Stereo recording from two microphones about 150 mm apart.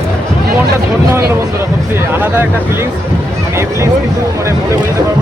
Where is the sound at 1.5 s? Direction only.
15° right (ahead or behind).